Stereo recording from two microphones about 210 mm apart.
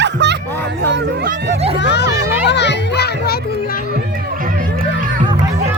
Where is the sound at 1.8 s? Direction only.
55° left (ahead or behind).